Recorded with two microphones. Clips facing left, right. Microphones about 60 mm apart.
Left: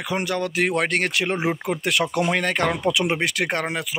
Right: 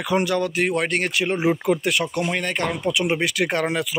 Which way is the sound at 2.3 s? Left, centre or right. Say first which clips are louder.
Left 2 dB; left.